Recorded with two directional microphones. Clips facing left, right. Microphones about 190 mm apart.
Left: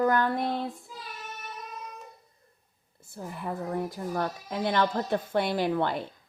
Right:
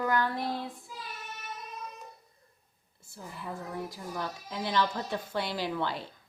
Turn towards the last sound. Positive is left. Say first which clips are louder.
# left 6 dB
turn(degrees=55)  # may be behind; listen again after turning